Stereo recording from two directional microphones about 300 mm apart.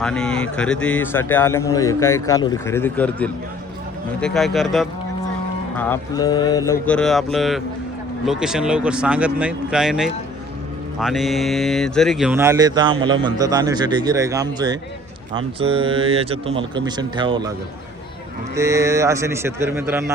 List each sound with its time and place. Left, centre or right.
0.0 s speech: centre
18.5 s speech: centre